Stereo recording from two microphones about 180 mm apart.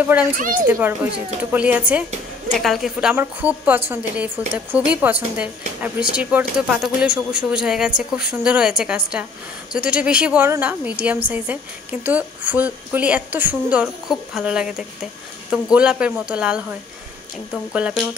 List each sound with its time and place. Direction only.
0.4 s a child's voice: 45° right (ahead or behind)
0.7 s a woman's voice: 10° right (ahead or behind)